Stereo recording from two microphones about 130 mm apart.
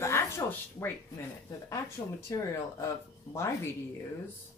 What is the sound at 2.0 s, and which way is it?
Speech, 40° left (ahead or behind).